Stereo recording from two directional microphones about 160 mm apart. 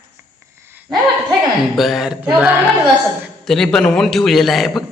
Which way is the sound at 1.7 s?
Centre (ahead or behind).